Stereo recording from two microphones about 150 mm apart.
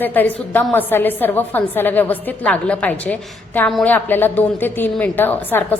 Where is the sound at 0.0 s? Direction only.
10° left (ahead or behind).